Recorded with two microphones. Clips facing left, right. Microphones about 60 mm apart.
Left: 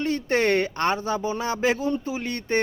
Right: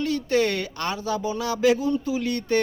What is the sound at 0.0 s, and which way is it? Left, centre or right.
Speech, left.